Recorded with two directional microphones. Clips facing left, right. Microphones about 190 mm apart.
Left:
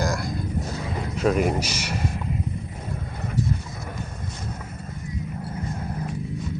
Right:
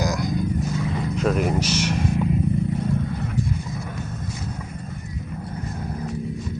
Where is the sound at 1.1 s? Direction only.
Centre (ahead or behind).